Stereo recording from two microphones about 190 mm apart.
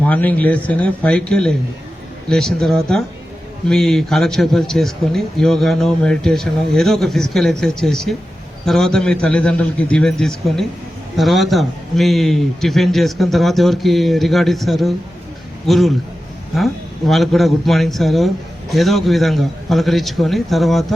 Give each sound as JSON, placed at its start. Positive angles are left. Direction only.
{"t": 0.0, "sound": "a man's voice", "side_deg": 10}